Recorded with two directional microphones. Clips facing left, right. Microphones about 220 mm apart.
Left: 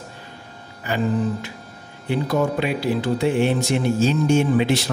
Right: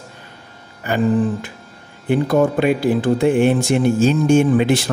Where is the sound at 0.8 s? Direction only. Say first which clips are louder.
Right 5 dB; 50° right (ahead or behind).